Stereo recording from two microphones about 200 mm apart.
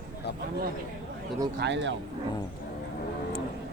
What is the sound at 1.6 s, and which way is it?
Speech, 60° right (ahead or behind).